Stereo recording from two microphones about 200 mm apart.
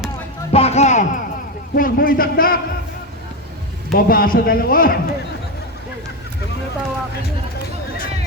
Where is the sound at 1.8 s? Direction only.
45° left (ahead or behind).